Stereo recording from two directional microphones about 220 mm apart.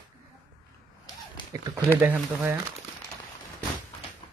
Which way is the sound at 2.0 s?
10° right (ahead or behind).